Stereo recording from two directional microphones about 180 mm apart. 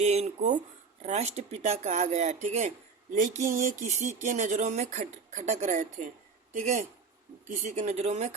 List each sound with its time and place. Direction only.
0.0 s speech: 35° right (ahead or behind)